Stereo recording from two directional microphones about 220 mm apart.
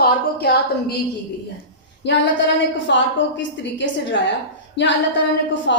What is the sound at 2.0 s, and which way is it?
A woman's voice, 50° left (ahead or behind).